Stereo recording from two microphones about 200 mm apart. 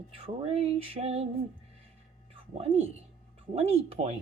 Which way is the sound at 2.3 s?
30° right (ahead or behind).